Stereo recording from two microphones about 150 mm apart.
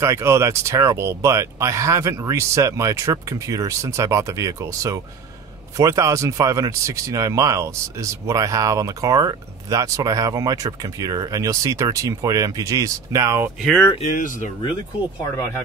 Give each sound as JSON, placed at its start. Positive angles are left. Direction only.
{"t": 0.0, "sound": "speech", "side_deg": -20}
{"t": 14.1, "sound": "speech", "side_deg": 60}